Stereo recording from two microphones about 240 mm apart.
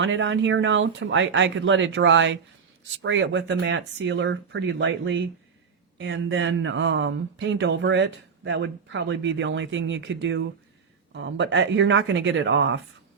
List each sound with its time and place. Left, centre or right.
0.0 s speech: right